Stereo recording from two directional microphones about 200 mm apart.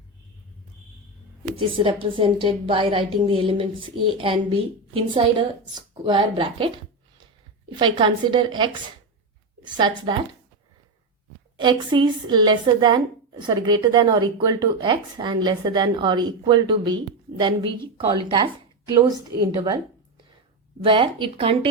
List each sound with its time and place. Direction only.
1.5 s a woman's voice: 25° right (ahead or behind)
7.8 s a woman's voice: 25° right (ahead or behind)
11.5 s a woman's voice: 25° right (ahead or behind)
19.5 s a woman's voice: 20° right (ahead or behind)
20.8 s a woman's voice: 25° right (ahead or behind)